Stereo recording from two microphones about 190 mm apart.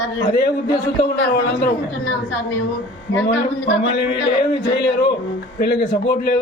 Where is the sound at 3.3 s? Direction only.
60° left (ahead or behind).